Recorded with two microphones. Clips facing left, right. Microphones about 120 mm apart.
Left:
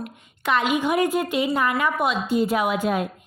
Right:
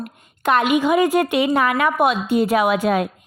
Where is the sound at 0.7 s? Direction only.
90° right.